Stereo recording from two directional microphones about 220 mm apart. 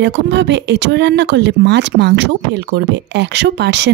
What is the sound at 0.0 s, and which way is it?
Speech, 50° right (ahead or behind).